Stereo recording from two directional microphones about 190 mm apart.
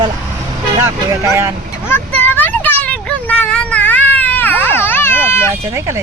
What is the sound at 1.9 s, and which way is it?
Vehicle, 10° left (ahead or behind).